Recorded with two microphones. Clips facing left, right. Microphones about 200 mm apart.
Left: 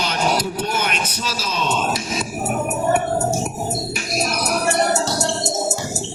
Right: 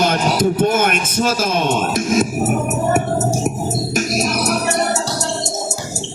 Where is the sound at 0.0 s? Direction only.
50° right (ahead or behind).